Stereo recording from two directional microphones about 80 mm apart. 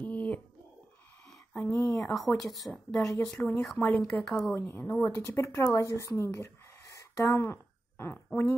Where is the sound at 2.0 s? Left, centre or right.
Centre.